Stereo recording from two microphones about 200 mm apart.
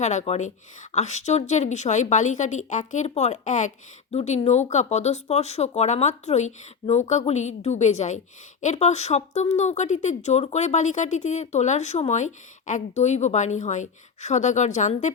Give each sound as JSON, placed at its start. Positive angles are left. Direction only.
{"t": 0.0, "sound": "speech", "side_deg": 35}